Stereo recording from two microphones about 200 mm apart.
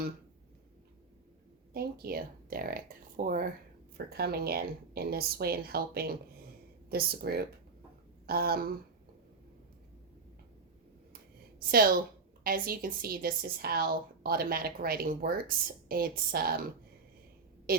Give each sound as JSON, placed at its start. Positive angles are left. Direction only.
{"t": 1.7, "sound": "speech", "side_deg": -50}
{"t": 11.7, "sound": "speech", "side_deg": -45}
{"t": 17.7, "sound": "a sound", "side_deg": -50}